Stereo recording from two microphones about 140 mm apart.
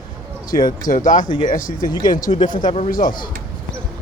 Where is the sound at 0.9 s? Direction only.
70° left (ahead or behind).